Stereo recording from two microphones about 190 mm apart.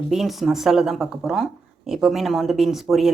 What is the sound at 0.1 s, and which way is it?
Speech, centre (ahead or behind).